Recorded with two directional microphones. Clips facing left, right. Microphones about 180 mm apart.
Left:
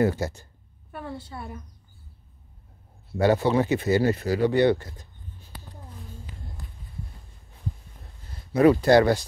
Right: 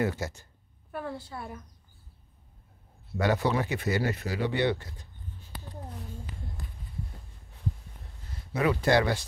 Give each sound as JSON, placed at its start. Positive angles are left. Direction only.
{"t": 0.0, "sound": "speech", "side_deg": 35}
{"t": 0.9, "sound": "a woman's voice", "side_deg": 0}
{"t": 3.2, "sound": "speech", "side_deg": 30}
{"t": 8.6, "sound": "speech", "side_deg": 40}